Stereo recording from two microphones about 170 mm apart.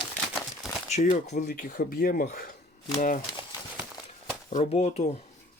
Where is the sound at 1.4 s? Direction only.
50° left (ahead or behind).